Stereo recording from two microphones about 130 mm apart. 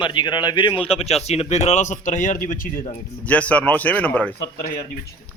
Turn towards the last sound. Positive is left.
turn(degrees=10)  # may be behind; listen again after turning